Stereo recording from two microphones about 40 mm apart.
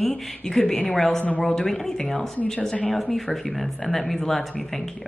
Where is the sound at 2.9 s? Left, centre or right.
Centre.